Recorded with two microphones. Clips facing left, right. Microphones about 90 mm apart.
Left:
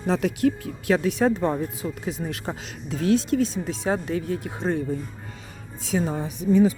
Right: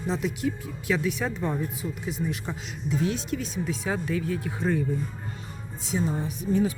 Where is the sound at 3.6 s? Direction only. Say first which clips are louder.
Left 3 dB; 30° left (ahead or behind).